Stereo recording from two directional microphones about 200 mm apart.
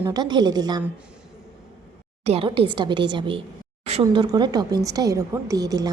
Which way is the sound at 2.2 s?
30° right (ahead or behind).